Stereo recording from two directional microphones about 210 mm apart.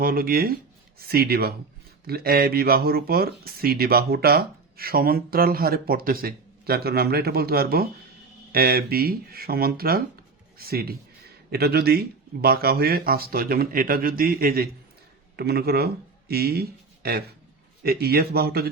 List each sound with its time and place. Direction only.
0.0 s speech: 45° right (ahead or behind)